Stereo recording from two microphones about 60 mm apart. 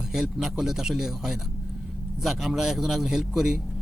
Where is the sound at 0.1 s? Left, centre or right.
Centre.